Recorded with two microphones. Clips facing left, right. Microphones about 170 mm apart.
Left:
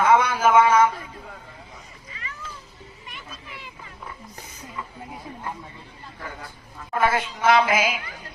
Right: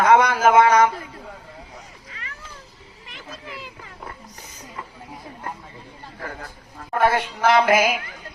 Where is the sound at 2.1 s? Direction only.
70° right (ahead or behind).